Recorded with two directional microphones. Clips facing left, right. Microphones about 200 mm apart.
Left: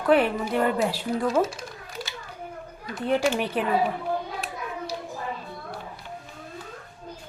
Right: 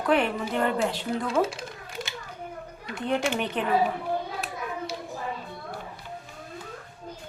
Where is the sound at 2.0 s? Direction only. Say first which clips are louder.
Even; 20° right (ahead or behind).